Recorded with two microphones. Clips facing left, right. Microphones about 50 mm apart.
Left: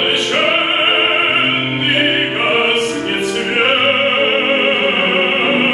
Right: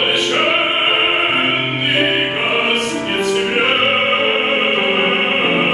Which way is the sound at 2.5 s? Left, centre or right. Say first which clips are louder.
Left 2 dB; centre.